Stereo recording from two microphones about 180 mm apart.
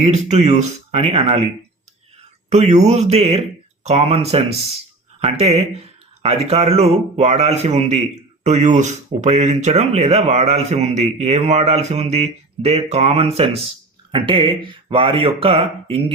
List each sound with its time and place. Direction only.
0.0 s speech: 40° right (ahead or behind)
2.5 s speech: 40° right (ahead or behind)